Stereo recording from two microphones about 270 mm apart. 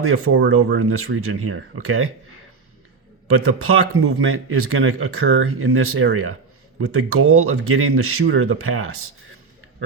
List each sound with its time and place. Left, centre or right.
0.5 s speech: right
3.4 s speech: right